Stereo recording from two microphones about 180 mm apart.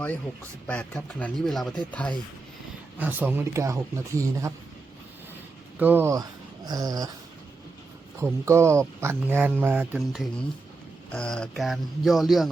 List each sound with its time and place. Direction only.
0.7 s speech: 5° left (ahead or behind)
3.0 s speech: 10° right (ahead or behind)
5.8 s speech: 10° right (ahead or behind)
6.7 s dog: 20° right (ahead or behind)
8.2 s speech: 15° right (ahead or behind)
11.1 s speech: 5° left (ahead or behind)